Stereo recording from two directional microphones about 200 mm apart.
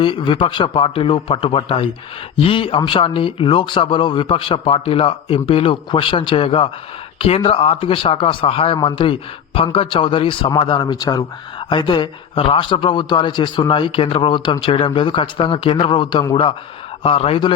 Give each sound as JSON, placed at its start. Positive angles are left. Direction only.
{"t": 0.0, "sound": "speech", "side_deg": 25}